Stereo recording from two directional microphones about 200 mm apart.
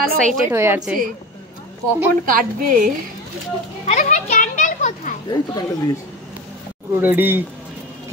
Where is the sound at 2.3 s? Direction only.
45° right (ahead or behind).